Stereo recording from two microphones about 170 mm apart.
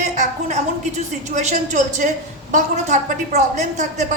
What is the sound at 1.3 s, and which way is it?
A woman's voice, 45° right (ahead or behind).